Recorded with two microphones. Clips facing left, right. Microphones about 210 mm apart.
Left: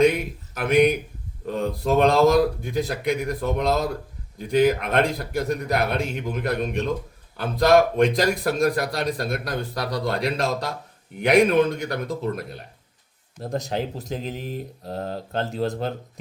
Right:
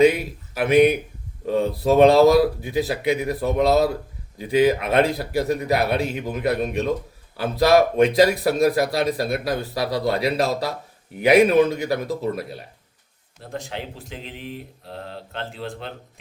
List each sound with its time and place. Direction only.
0.0 s speech: 5° right (ahead or behind)
13.4 s speech: 40° left (ahead or behind)